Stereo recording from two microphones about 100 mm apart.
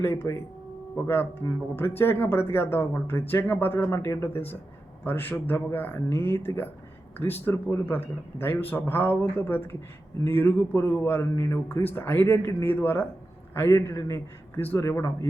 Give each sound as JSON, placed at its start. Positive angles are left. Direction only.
{"t": 0.0, "sound": "a man's voice", "side_deg": 25}